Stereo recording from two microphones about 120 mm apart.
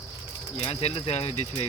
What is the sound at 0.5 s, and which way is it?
Speech, 60° left (ahead or behind).